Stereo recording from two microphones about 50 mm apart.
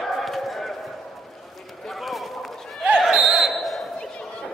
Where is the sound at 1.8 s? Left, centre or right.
Centre.